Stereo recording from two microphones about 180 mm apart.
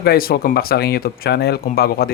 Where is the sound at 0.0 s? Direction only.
55° left (ahead or behind).